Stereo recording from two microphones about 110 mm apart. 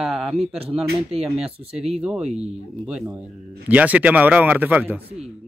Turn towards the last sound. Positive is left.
turn(degrees=-15)  # may be behind; listen again after turning